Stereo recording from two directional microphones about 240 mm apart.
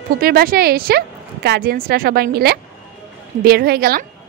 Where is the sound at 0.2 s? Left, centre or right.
Right.